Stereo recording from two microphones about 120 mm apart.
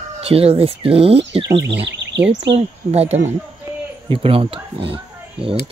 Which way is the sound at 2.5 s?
60° right (ahead or behind).